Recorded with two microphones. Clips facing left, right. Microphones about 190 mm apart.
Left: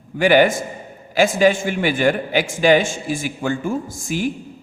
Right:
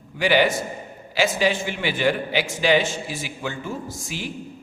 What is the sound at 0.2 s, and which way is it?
A man's voice, 50° left (ahead or behind).